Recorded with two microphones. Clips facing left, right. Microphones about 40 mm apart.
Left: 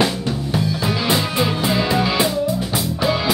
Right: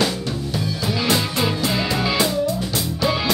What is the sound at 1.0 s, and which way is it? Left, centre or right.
Music, centre.